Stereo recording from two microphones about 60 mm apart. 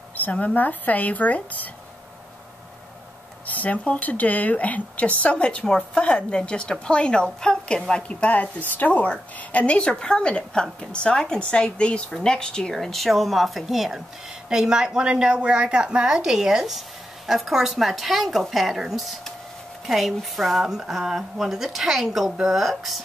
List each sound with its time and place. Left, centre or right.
0.1 s a sound: left
0.6 s speech: left
3.4 s a woman's voice: left; by 22.9 s centre